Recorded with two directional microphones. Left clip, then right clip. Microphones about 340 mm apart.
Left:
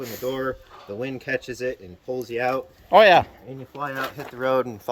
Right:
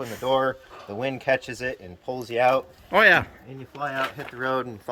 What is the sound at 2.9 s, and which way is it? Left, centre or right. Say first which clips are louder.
Speech: left 4 dB; centre.